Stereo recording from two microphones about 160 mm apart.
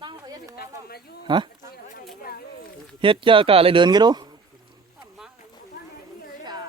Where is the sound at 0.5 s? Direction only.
75° left (ahead or behind).